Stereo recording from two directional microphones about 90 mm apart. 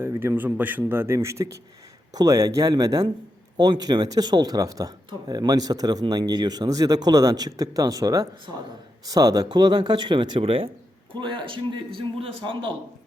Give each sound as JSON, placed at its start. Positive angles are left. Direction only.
{"t": 0.0, "sound": "a man's voice", "side_deg": -30}
{"t": 0.3, "sound": "a man's voice", "side_deg": -20}
{"t": 11.1, "sound": "a man's voice", "side_deg": -65}